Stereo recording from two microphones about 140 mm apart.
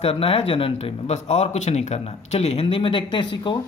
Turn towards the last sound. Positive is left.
turn(degrees=35)  # may be behind; listen again after turning